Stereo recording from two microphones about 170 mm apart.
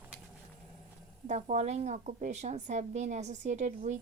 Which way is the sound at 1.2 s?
45° right (ahead or behind).